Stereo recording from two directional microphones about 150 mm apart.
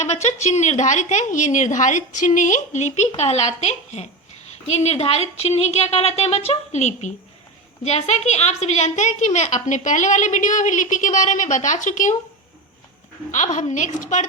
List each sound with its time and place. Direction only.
0.0 s a woman's voice: 50° left (ahead or behind)
13.3 s a woman's voice: 55° left (ahead or behind)